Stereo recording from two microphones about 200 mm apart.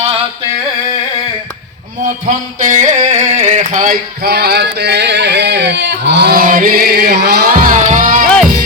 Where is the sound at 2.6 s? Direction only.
40° right (ahead or behind).